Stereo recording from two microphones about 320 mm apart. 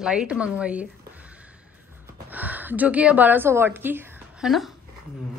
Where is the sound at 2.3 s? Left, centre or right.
Centre.